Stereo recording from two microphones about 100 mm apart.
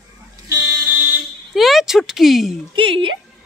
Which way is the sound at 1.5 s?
Centre (ahead or behind).